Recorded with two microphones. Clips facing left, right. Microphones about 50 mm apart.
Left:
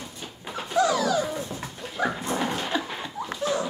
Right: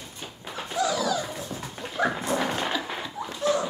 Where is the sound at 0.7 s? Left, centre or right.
Left.